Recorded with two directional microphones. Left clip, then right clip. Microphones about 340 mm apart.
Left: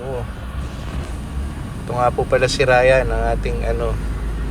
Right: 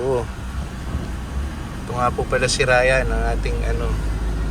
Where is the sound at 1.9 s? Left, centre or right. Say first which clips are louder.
Left 4 dB; centre.